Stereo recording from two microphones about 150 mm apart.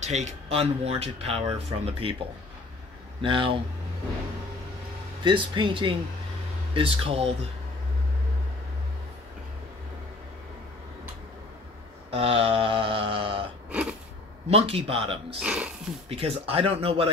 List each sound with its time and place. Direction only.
0.0 s speech: 50° right (ahead or behind)
3.2 s speech: 35° right (ahead or behind)
5.2 s speech: 30° right (ahead or behind)
12.1 s a sound: 40° right (ahead or behind)
13.7 s wheeze: 10° right (ahead or behind)
14.5 s speech: 40° right (ahead or behind)
15.4 s speech: 5° right (ahead or behind)
16.1 s speech: 40° right (ahead or behind)